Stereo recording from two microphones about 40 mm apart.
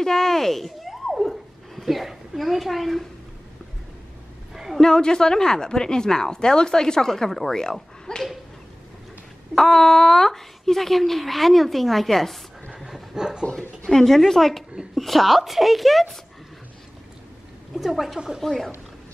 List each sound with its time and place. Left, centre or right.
0.0 s speech: centre
4.7 s a woman's voice: centre
9.6 s speech: centre
12.7 s a sound: centre
13.8 s a woman's voice: centre
17.7 s speech: centre
18.4 s a woman's voice: centre